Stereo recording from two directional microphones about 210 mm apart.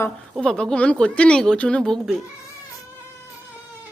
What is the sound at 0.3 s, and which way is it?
Speech, 5° left (ahead or behind).